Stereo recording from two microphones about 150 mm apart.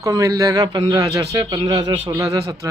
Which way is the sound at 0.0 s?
20° right (ahead or behind).